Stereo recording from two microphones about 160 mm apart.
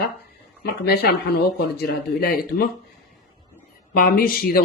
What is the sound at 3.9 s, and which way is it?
Speech, 65° left (ahead or behind).